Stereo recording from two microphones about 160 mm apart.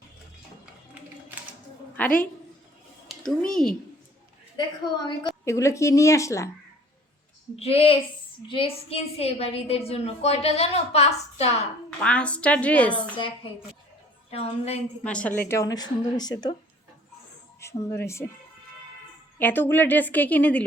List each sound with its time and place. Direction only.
3.1 s speech: centre (ahead or behind)
4.5 s speech: 30° left (ahead or behind)
5.5 s speech: 20° left (ahead or behind)
7.5 s a woman's voice: 40° left (ahead or behind)
12.0 s a woman's voice: 5° left (ahead or behind)
14.3 s a woman's voice: 40° left (ahead or behind)
15.0 s a woman's voice: 10° left (ahead or behind); by 16.6 s 25° left (ahead or behind)
17.6 s a woman's voice: 15° left (ahead or behind)
19.4 s a woman's voice: 10° left (ahead or behind)